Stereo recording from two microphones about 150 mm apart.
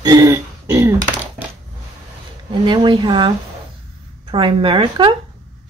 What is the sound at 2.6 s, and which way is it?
Speech, 30° right (ahead or behind).